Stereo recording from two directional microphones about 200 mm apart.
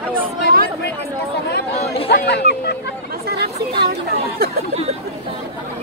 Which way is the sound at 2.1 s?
55° left (ahead or behind).